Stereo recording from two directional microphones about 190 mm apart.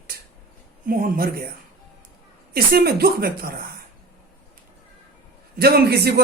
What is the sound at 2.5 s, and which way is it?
A man's voice, 55° right (ahead or behind).